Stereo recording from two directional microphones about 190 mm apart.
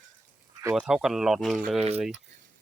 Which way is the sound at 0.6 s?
5° right (ahead or behind).